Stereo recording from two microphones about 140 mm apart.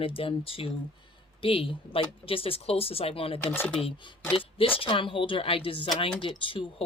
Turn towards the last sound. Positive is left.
turn(degrees=35)  # may be behind; listen again after turning